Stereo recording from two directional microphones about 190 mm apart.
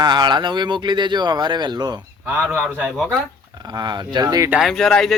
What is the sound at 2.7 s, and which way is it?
Speech, centre (ahead or behind).